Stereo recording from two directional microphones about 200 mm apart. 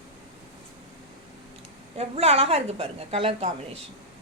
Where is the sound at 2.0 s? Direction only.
30° right (ahead or behind).